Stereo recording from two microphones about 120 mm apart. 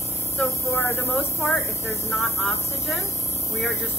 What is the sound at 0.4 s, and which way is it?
Speech, 25° left (ahead or behind).